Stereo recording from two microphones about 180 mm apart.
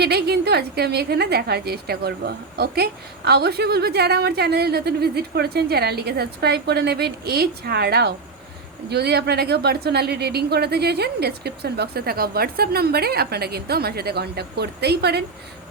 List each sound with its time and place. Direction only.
0.0 s a woman's voice: 65° right (ahead or behind)